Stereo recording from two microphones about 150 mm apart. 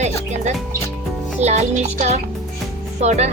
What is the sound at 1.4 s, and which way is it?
Speech, 50° right (ahead or behind).